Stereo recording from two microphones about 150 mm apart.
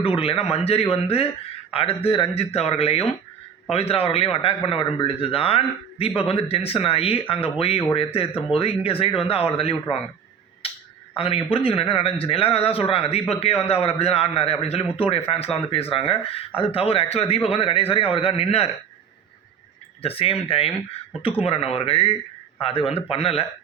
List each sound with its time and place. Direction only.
0.0 s a man's voice: 40° left (ahead or behind)
10.6 s a sound: 40° left (ahead or behind)
11.2 s a man's voice: 35° left (ahead or behind)
20.0 s a man's voice: 40° left (ahead or behind)